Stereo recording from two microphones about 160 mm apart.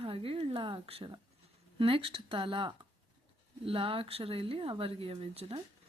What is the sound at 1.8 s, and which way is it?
Speech, 35° right (ahead or behind).